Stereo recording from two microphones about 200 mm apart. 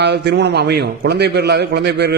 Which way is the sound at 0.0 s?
60° right (ahead or behind).